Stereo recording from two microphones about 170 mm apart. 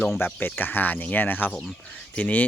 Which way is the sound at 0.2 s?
10° left (ahead or behind).